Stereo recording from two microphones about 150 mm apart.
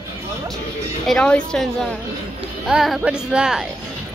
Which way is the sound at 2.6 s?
5° right (ahead or behind).